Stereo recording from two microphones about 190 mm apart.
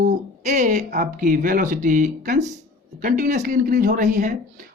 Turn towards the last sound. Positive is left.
turn(degrees=-40)  # may be behind; listen again after turning